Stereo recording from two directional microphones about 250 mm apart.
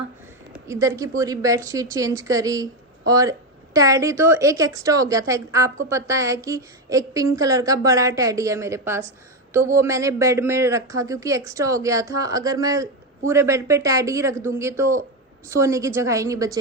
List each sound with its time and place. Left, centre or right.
0.5 s speech: centre